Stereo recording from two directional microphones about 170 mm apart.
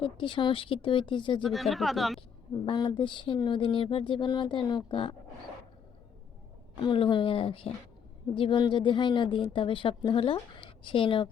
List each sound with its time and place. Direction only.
0.0 s a woman's voice: 30° left (ahead or behind)
1.4 s speech: centre (ahead or behind)
2.6 s a woman's voice: 30° left (ahead or behind)
6.7 s a woman's voice: 30° left (ahead or behind)